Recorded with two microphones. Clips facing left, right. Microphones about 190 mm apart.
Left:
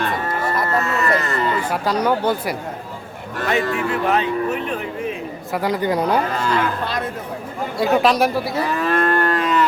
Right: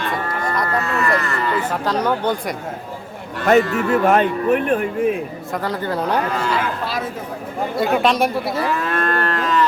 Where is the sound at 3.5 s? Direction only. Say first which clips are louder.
Right 6 dB; 45° right (ahead or behind).